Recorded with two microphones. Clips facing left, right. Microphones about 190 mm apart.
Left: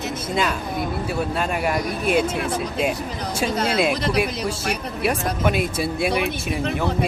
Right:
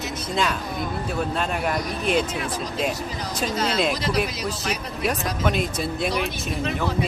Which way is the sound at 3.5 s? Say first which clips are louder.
Left 1 dB; 55° left (ahead or behind).